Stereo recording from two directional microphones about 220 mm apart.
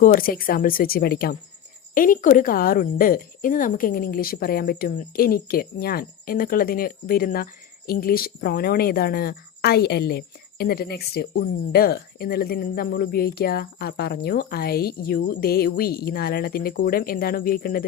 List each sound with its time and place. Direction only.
0.0 s a woman's voice: 40° left (ahead or behind)